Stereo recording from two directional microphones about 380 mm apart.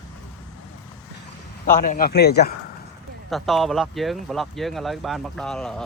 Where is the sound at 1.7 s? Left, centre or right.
Left.